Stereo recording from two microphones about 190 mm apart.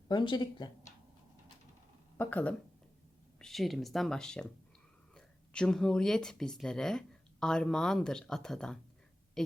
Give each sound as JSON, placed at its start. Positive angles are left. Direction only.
{"t": 0.1, "sound": "speech", "side_deg": 25}
{"t": 2.1, "sound": "speech", "side_deg": 10}